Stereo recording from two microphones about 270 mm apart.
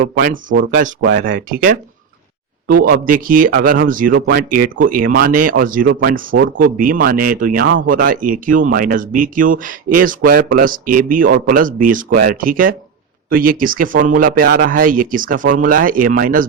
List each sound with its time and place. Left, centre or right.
0.0 s speech: right
3.0 s speech: right